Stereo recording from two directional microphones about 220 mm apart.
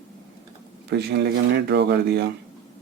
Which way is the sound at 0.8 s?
50° right (ahead or behind).